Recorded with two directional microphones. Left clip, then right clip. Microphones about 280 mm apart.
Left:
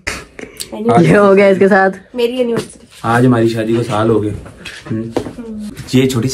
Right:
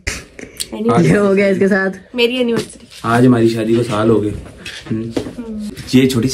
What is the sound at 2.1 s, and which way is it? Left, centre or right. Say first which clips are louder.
Speech: even; centre.